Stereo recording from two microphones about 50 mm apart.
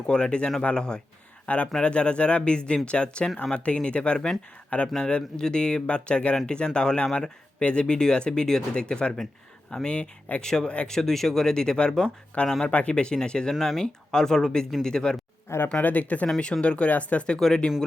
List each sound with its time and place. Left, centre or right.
0.1 s speech: centre
10.4 s speech: centre
12.7 s speech: left
15.4 s speech: left
15.8 s speech: left